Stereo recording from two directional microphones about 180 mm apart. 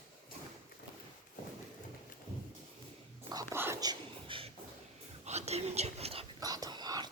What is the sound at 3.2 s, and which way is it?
Whispering, 15° right (ahead or behind).